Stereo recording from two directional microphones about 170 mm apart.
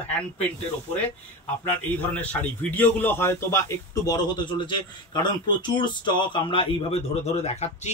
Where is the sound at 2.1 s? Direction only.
10° left (ahead or behind).